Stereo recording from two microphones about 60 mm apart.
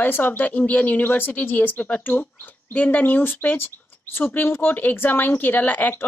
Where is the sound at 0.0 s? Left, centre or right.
Left.